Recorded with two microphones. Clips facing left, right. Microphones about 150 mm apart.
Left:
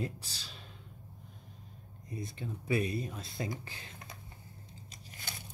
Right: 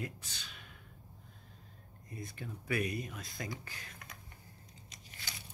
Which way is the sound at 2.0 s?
25° left (ahead or behind).